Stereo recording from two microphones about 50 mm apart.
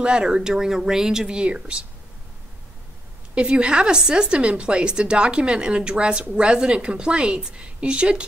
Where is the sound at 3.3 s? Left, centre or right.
Right.